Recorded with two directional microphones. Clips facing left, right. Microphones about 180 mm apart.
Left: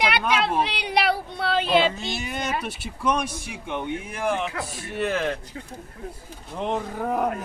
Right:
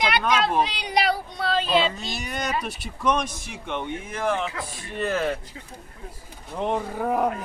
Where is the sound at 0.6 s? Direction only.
60° left (ahead or behind).